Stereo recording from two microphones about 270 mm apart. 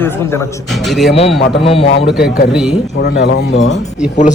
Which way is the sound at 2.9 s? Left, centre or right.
Left.